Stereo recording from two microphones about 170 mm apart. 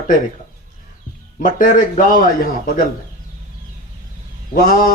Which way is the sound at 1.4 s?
50° left (ahead or behind).